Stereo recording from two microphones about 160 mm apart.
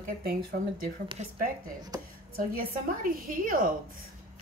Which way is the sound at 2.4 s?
60° right (ahead or behind).